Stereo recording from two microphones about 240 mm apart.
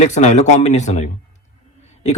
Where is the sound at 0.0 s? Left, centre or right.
Left.